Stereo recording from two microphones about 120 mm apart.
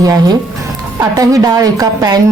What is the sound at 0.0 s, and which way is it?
A woman's voice, 30° right (ahead or behind).